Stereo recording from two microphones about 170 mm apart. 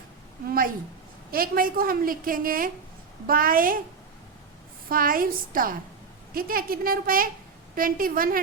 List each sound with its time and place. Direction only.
1.3 s a woman's voice: 60° right (ahead or behind)
4.9 s a woman's voice: 55° right (ahead or behind)